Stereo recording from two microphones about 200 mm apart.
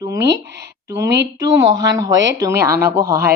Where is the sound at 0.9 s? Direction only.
15° right (ahead or behind).